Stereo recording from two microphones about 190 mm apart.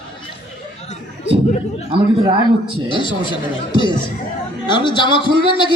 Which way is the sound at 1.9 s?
25° right (ahead or behind).